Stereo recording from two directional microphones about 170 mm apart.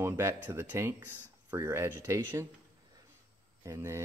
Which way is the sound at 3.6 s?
15° right (ahead or behind).